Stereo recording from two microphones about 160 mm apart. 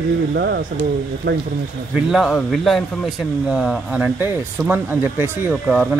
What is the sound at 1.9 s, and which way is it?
Speech, 5° right (ahead or behind).